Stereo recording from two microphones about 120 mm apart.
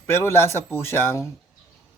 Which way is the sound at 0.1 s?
20° left (ahead or behind).